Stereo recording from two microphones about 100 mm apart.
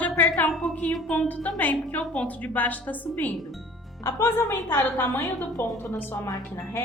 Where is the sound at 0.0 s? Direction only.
15° left (ahead or behind).